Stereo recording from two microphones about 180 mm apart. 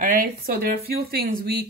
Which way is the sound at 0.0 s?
55° right (ahead or behind).